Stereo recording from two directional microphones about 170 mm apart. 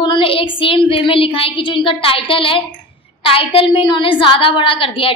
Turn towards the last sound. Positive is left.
turn(degrees=30)  # may be behind; listen again after turning